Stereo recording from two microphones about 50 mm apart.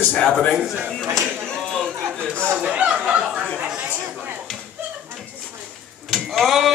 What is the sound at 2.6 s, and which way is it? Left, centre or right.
Chatter, right.